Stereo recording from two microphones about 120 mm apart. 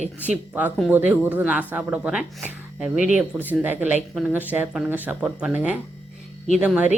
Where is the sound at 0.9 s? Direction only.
15° right (ahead or behind).